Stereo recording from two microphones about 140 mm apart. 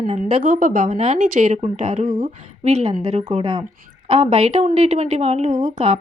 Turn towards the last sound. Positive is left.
turn(degrees=-60)  # may be behind; listen again after turning